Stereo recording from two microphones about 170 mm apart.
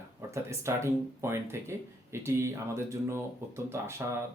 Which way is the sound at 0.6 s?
15° right (ahead or behind).